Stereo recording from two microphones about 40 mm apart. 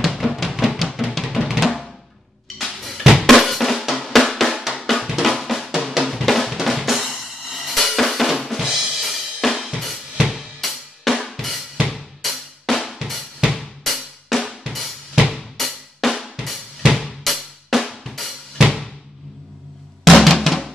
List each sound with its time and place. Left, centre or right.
0.0 s music: centre
1.1 s drum: centre
9.4 s drum kit: centre
11.9 s drum: centre
13.6 s drum kit: centre
15.1 s drum kit: centre
15.5 s drum: centre
16.4 s drum kit: centre
20.1 s drum: centre